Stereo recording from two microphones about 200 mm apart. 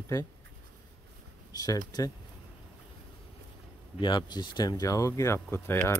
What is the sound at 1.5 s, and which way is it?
Speech, 20° left (ahead or behind).